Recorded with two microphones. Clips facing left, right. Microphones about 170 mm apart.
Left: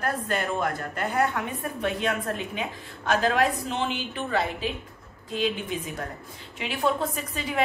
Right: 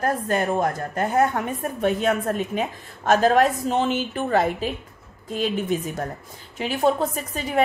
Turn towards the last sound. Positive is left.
turn(degrees=-40)  # may be behind; listen again after turning